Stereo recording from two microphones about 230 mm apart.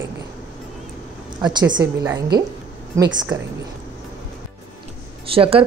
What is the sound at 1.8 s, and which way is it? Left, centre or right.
Speech, centre.